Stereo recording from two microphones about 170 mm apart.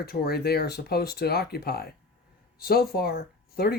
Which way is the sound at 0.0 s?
65° left (ahead or behind).